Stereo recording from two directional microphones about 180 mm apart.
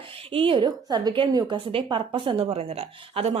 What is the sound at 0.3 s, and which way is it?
A woman's voice, 30° right (ahead or behind).